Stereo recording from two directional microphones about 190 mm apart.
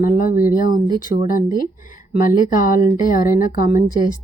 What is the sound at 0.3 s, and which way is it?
Speech, 45° left (ahead or behind).